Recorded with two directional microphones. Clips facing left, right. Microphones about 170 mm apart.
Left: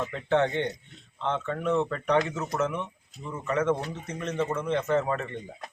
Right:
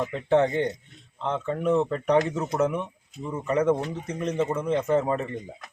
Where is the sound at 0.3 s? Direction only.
35° right (ahead or behind).